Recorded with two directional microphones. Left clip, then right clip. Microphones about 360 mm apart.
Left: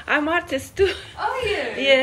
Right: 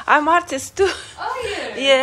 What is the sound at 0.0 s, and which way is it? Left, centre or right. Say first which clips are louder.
A woman's voice: right 6 dB; centre.